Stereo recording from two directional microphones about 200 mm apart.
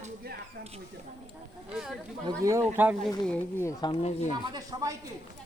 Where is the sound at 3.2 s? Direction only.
10° left (ahead or behind).